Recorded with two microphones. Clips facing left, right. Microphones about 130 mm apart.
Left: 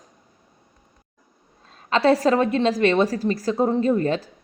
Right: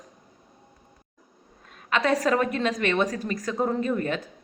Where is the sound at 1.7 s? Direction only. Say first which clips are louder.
Left 6 dB; 30° left (ahead or behind).